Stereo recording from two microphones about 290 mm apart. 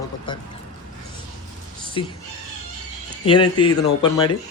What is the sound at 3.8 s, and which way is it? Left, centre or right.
Speech, centre.